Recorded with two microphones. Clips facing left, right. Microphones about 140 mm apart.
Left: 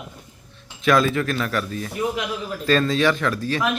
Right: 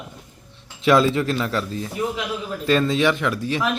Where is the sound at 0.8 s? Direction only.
20° right (ahead or behind).